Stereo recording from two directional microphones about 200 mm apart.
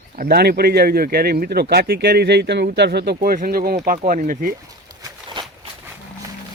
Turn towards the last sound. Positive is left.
turn(degrees=-20)  # may be behind; listen again after turning